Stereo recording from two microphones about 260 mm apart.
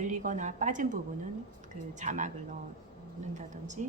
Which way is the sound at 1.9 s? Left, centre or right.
Right.